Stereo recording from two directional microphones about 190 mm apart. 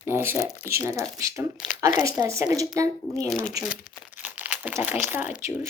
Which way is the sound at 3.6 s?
5° right (ahead or behind).